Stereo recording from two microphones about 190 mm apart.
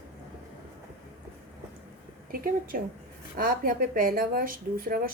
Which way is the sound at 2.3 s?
50° right (ahead or behind).